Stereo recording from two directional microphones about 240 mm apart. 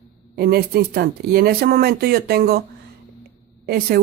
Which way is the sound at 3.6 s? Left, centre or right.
Right.